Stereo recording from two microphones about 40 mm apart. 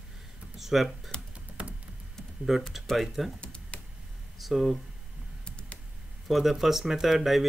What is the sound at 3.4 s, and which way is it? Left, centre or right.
Computer keyboard, left.